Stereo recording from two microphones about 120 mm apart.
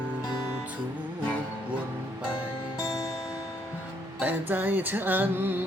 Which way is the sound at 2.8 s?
30° left (ahead or behind).